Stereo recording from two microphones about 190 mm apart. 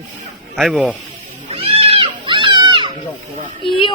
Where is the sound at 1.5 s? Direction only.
30° right (ahead or behind).